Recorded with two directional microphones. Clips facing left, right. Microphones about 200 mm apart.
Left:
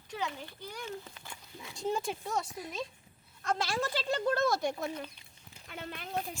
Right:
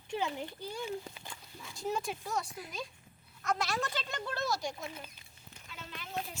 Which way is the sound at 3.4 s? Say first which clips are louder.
Left 2 dB; 30° left (ahead or behind).